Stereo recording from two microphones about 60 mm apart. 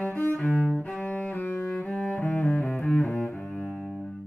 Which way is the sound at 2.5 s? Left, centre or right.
Centre.